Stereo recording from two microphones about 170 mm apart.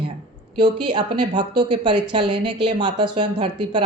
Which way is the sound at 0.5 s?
25° right (ahead or behind).